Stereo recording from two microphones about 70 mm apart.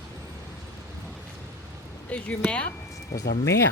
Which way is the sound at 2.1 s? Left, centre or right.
Centre.